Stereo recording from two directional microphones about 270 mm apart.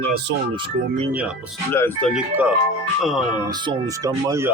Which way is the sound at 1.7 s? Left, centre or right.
Centre.